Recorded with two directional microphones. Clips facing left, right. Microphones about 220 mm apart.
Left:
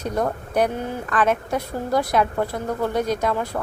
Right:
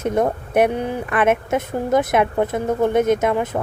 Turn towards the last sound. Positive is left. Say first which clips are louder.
# right 5 dB
turn(degrees=-20)  # may be behind; listen again after turning